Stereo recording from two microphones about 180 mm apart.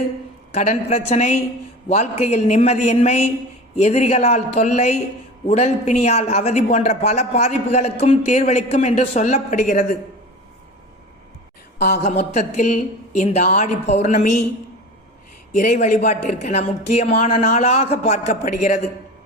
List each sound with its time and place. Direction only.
0.5 s speech: 35° left (ahead or behind)
12.0 s speech: 40° left (ahead or behind)
15.5 s speech: 40° left (ahead or behind)